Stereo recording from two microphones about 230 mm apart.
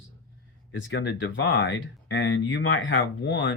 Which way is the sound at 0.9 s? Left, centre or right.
Left.